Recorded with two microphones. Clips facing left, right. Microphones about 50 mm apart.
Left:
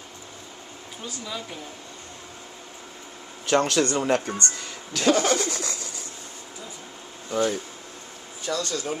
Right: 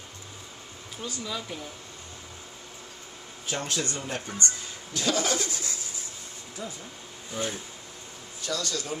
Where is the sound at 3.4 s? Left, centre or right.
Left.